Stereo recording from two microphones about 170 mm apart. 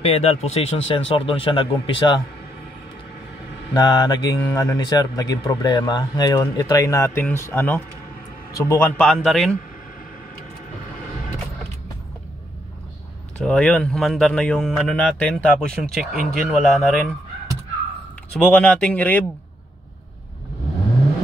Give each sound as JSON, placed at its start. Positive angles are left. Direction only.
{"t": 0.0, "sound": "speech", "side_deg": 35}
{"t": 3.7, "sound": "speech", "side_deg": 25}
{"t": 13.4, "sound": "speech", "side_deg": 5}
{"t": 18.3, "sound": "speech", "side_deg": 5}